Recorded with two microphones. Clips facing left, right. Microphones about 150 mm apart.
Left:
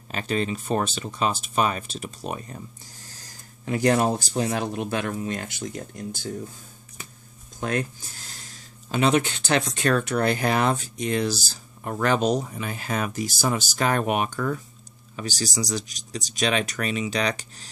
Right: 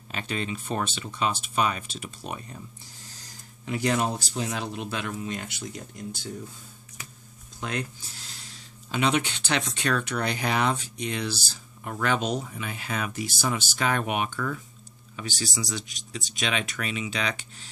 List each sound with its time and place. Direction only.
0.1 s speech: 40° left (ahead or behind)
3.6 s speech: 45° left (ahead or behind)
7.6 s speech: 50° left (ahead or behind)